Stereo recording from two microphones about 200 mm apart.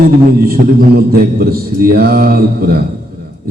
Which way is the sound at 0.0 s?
50° right (ahead or behind).